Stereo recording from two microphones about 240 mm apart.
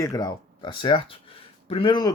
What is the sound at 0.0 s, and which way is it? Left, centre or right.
Speech, centre.